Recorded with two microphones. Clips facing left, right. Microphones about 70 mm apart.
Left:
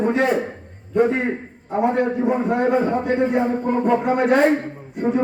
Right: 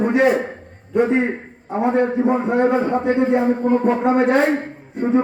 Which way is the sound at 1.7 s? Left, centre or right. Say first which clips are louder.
Right 1 dB; right.